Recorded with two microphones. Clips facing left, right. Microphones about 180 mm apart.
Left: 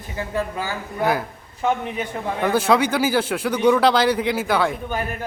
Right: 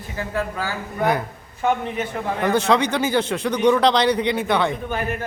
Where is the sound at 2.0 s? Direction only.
5° left (ahead or behind).